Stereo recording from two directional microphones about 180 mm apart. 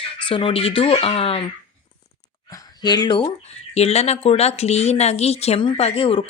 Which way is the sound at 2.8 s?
25° left (ahead or behind).